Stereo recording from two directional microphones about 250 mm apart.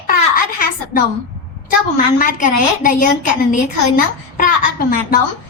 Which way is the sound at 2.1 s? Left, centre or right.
Left.